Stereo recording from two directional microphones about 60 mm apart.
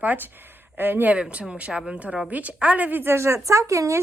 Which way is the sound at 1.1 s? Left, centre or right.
Right.